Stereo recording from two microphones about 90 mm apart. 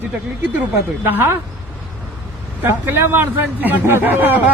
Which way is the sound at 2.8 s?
25° right (ahead or behind).